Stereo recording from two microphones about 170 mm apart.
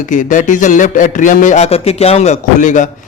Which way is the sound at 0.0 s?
50° left (ahead or behind).